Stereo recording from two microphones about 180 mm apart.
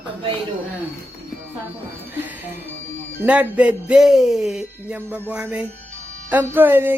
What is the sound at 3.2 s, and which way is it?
Speech, 10° right (ahead or behind).